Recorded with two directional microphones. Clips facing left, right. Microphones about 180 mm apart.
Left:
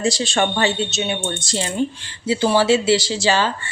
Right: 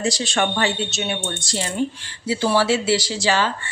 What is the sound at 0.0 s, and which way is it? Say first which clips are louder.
Speech: left 2 dB; 30° left (ahead or behind).